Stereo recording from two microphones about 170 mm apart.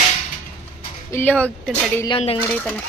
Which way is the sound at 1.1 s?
10° left (ahead or behind).